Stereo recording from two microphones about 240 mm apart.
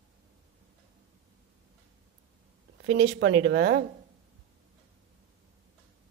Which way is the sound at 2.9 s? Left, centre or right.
Right.